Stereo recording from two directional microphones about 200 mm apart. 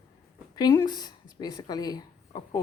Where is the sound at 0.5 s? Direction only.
20° left (ahead or behind).